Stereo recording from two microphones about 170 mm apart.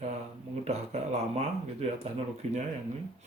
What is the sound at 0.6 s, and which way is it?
Speech, 40° right (ahead or behind).